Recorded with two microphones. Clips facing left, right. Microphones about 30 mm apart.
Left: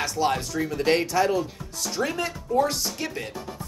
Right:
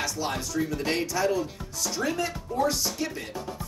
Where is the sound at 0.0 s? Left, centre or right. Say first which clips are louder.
Left 5 dB; left.